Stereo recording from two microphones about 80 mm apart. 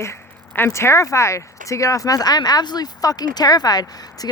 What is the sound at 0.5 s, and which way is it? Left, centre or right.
Speech, left.